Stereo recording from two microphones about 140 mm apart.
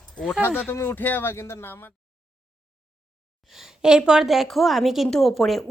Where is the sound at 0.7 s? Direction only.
15° left (ahead or behind).